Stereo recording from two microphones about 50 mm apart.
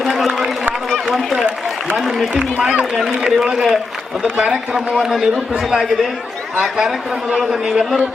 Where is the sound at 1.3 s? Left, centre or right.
Right.